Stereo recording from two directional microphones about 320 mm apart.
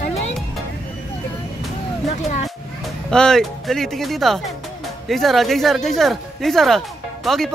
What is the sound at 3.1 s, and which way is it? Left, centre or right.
Speech, centre.